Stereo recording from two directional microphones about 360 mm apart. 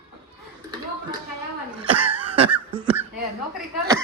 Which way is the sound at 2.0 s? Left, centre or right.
Right.